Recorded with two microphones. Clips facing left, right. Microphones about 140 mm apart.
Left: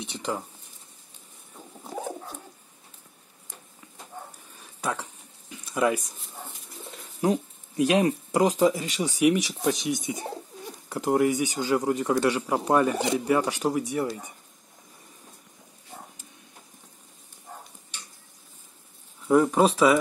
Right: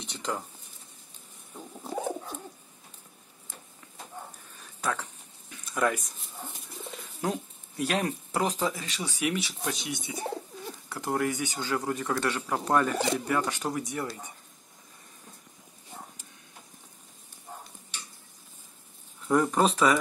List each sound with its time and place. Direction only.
0.0 s speech: 10° left (ahead or behind)
1.8 s bird: 5° right (ahead or behind)
5.5 s a sound: 10° left (ahead or behind)
7.2 s speech: 15° left (ahead or behind)
10.9 s speech: 15° left (ahead or behind)
19.2 s speech: 5° left (ahead or behind)